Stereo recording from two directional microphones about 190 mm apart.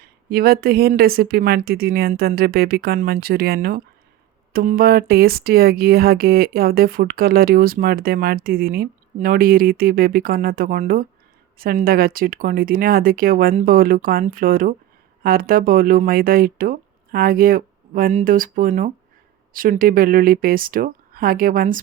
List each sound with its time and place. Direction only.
0.0 s speech: 55° right (ahead or behind)